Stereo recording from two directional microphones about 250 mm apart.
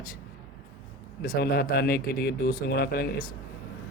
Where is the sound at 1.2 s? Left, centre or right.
Left.